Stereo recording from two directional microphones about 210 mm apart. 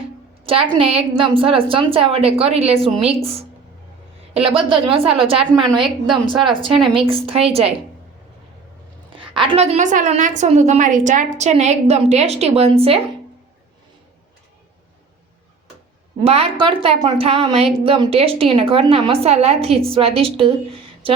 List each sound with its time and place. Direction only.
0.4 s a woman's voice: 25° right (ahead or behind)
9.1 s a woman's voice: 25° right (ahead or behind)
16.2 s a woman's voice: 30° right (ahead or behind)